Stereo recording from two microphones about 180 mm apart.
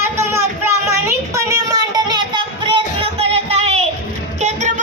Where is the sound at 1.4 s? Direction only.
20° right (ahead or behind).